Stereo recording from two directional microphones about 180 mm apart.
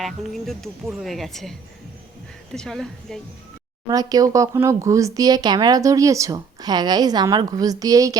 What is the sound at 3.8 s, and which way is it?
Speech, 20° right (ahead or behind).